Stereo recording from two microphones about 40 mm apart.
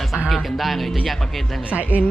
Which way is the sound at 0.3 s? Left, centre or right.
Centre.